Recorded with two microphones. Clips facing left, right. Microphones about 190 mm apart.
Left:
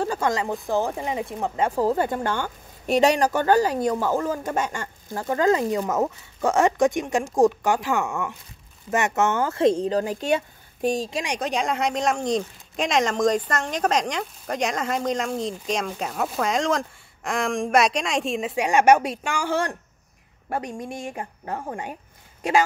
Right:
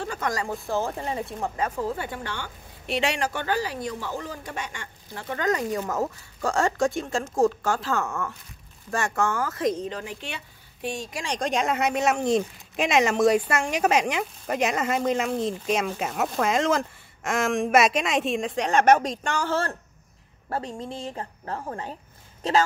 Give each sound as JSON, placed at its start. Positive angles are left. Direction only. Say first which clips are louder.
{"t": 0.0, "sound": "speech", "louder": "left 5 dB", "side_deg": 30}
{"t": 1.7, "sound": "speech", "louder": "left 7 dB", "side_deg": 40}
{"t": 5.4, "sound": "speech", "louder": "left 5 dB", "side_deg": 25}
{"t": 11.2, "sound": "speech", "louder": "right 4 dB", "side_deg": 5}